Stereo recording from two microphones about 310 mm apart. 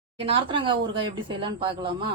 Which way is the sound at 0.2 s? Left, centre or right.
Centre.